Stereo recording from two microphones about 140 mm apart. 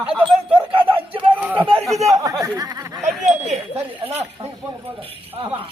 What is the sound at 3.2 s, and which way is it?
Wind chime, 55° right (ahead or behind).